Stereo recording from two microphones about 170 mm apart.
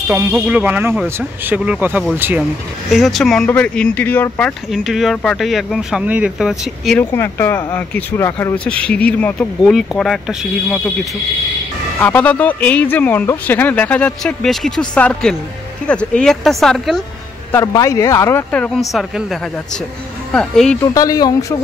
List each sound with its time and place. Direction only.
0.1 s speech: 10° right (ahead or behind)
2.9 s speech: centre (ahead or behind)
7.0 s speech: 15° left (ahead or behind)
12.0 s speech: 10° left (ahead or behind)
17.5 s speech: 20° left (ahead or behind)
18.5 s speech: 5° left (ahead or behind)
20.3 s speech: 5° left (ahead or behind)
20.8 s speech: 20° left (ahead or behind)